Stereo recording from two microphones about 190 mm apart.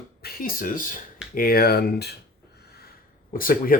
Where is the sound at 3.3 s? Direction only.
50° left (ahead or behind).